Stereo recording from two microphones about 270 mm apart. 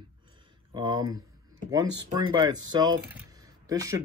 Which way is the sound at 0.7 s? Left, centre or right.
Centre.